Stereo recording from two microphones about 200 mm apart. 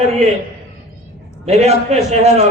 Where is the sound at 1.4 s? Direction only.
30° right (ahead or behind).